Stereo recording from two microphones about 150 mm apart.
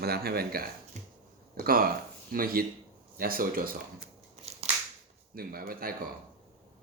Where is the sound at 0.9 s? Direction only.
50° right (ahead or behind).